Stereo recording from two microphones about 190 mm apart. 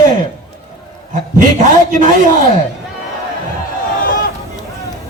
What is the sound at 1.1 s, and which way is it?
A man's voice, 40° right (ahead or behind).